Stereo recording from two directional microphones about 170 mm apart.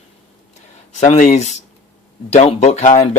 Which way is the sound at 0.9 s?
45° left (ahead or behind).